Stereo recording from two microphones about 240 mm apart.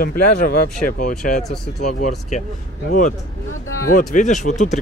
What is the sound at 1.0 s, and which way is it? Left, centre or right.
Speech, left.